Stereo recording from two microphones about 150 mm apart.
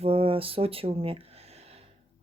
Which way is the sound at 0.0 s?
40° right (ahead or behind).